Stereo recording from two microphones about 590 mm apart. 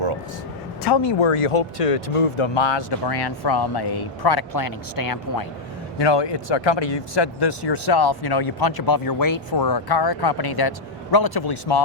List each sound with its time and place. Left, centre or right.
0.8 s speech: left
1.0 s speech: left
6.0 s speech: left